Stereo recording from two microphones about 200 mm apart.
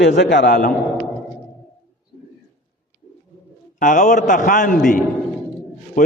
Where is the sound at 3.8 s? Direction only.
40° left (ahead or behind).